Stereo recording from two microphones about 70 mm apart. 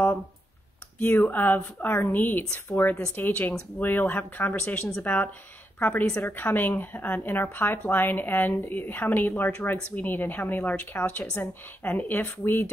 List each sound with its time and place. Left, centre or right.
0.9 s speech: left